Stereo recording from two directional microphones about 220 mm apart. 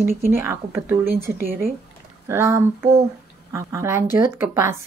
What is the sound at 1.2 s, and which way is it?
Speech, 40° right (ahead or behind).